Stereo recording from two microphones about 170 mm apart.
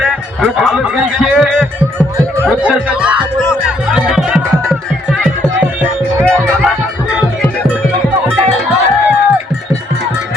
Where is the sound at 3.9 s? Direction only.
5° right (ahead or behind).